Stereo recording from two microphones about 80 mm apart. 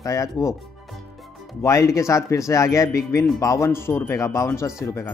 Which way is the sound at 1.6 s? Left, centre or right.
Left.